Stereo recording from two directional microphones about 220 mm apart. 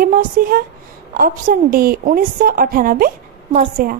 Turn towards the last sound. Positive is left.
turn(degrees=-40)  # may be behind; listen again after turning